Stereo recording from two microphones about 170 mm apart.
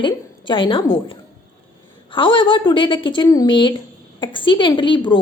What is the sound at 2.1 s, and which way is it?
A woman's voice, 30° left (ahead or behind).